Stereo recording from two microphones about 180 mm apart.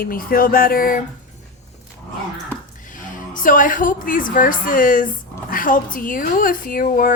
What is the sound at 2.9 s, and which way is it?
A woman's voice, 45° left (ahead or behind).